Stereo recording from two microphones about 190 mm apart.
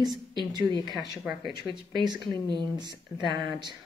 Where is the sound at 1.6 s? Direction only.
20° right (ahead or behind).